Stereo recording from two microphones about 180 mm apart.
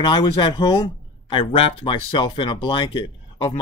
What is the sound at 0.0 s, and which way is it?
Speech, 25° left (ahead or behind).